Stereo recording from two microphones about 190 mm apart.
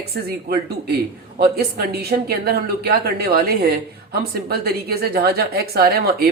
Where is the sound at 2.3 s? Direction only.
55° right (ahead or behind).